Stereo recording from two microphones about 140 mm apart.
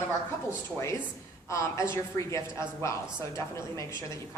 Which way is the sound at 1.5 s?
20° left (ahead or behind).